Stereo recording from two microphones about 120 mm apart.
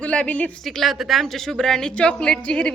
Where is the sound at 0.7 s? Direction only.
Centre (ahead or behind).